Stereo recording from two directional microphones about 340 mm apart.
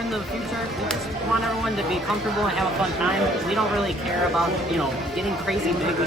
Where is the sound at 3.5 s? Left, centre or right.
Centre.